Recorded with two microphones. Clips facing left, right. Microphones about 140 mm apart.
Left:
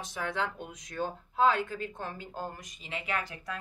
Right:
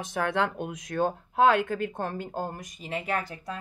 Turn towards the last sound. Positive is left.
turn(degrees=-45)  # may be behind; listen again after turning